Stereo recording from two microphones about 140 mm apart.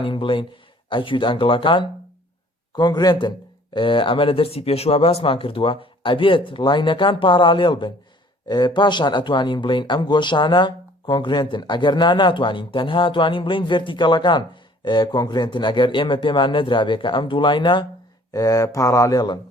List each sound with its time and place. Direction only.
0.0 s speech: 35° left (ahead or behind)
18.3 s speech: 25° left (ahead or behind)